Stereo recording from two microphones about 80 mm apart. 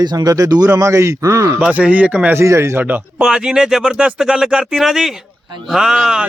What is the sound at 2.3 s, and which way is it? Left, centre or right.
Speech, right.